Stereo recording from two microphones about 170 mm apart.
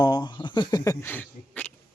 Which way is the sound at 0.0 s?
25° left (ahead or behind).